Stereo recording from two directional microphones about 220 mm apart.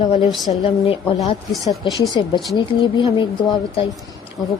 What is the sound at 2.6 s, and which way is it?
Speech, 20° left (ahead or behind).